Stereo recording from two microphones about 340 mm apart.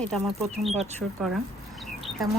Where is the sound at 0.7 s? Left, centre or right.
Centre.